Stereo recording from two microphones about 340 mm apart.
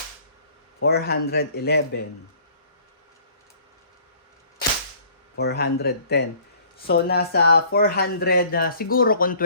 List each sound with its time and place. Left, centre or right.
0.8 s speech: left
5.4 s speech: left